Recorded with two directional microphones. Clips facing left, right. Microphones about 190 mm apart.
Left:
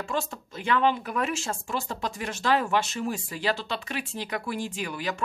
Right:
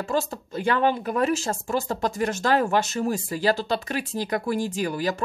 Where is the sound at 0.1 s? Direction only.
40° right (ahead or behind).